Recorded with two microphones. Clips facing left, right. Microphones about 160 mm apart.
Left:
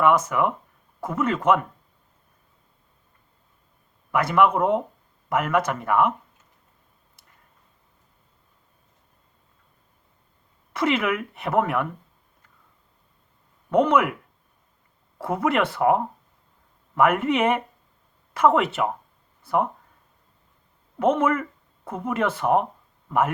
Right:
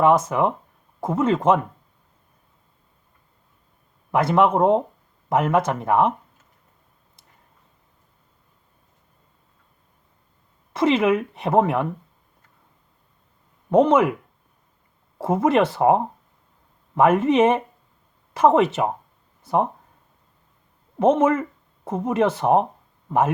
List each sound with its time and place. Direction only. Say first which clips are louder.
0.0 s speech: right 2 dB; 25° right (ahead or behind)
4.1 s speech: right 2 dB; 25° right (ahead or behind)
10.7 s speech: right 5 dB; 25° right (ahead or behind)
13.7 s speech: right 3 dB; 25° right (ahead or behind)
15.2 s speech: right 4 dB; 25° right (ahead or behind)
21.0 s speech: right 3 dB; 20° right (ahead or behind)